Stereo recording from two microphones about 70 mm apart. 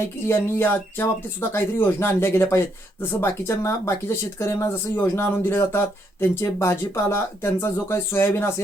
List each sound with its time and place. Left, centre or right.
0.0 s speech: left